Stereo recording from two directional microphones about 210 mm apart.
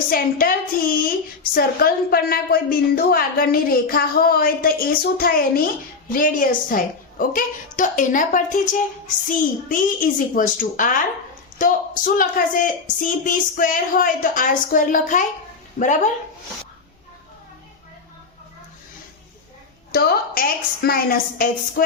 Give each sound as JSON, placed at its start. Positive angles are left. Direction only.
{"t": 0.1, "sound": "a woman's voice", "side_deg": 45}
{"t": 1.5, "sound": "a woman's voice", "side_deg": 45}
{"t": 19.9, "sound": "a woman's voice", "side_deg": 45}